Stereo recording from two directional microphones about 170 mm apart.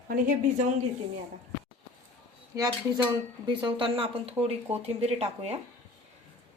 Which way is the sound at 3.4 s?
25° right (ahead or behind).